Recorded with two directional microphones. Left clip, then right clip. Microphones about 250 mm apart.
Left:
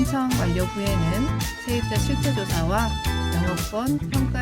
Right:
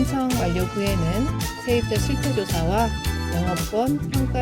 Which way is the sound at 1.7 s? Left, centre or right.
Centre.